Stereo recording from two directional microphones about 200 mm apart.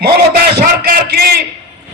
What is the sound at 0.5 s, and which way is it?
Speech, 50° right (ahead or behind).